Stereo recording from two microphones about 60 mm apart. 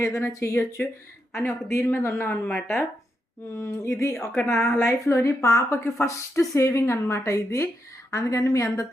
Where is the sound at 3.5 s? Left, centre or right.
Left.